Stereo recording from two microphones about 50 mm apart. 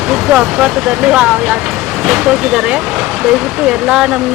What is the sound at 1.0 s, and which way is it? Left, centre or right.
Speech, centre.